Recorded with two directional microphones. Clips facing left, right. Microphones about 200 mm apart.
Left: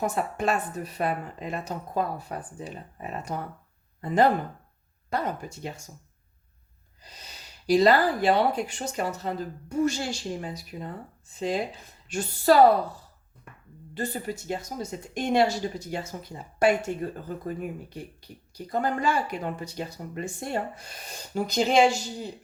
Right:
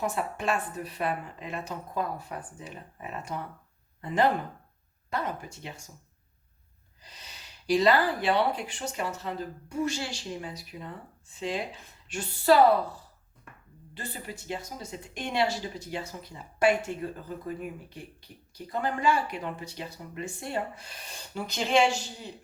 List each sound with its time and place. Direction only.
0.0 s speech: 40° left (ahead or behind)
7.0 s speech: 40° left (ahead or behind)
13.9 s speech: 45° left (ahead or behind)